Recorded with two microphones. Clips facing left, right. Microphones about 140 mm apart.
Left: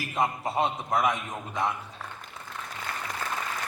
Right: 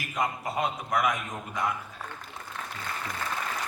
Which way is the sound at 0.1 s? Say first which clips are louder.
Left 2 dB; 25° left (ahead or behind).